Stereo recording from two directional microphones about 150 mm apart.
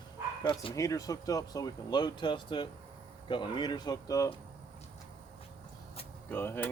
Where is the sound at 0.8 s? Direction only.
20° left (ahead or behind).